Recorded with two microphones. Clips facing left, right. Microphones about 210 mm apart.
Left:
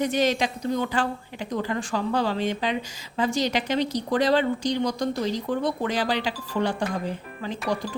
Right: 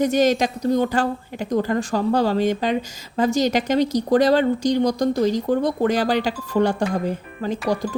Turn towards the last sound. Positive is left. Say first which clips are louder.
# right 6 dB
turn(degrees=-45)  # may be behind; listen again after turning